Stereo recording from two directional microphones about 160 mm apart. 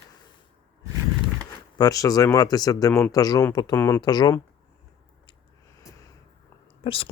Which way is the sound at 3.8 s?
15° left (ahead or behind).